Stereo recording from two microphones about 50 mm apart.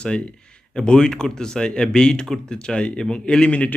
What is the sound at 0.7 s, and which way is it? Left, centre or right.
Speech, centre.